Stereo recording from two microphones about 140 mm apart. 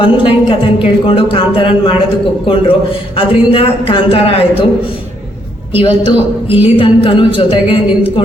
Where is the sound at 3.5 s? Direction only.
40° left (ahead or behind).